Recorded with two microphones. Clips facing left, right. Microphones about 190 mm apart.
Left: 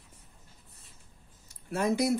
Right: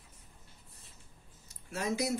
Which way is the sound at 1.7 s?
60° left (ahead or behind).